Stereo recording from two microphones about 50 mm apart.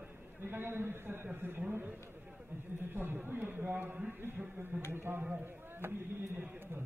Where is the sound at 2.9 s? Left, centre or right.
Right.